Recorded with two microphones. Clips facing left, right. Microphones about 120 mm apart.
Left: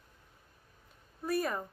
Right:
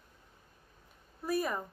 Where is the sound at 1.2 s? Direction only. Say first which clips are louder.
Even; centre (ahead or behind).